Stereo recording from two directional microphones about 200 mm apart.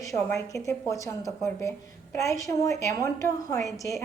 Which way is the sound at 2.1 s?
15° left (ahead or behind).